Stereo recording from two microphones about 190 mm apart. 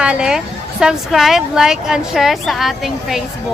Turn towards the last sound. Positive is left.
turn(degrees=0)  # may be behind; listen again after turning